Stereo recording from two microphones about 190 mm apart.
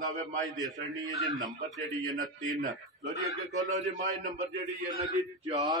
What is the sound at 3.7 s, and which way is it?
Speech, 40° right (ahead or behind).